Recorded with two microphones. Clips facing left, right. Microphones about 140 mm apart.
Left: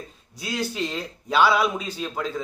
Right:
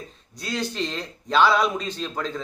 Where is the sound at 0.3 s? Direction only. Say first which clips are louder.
Even; 5° left (ahead or behind).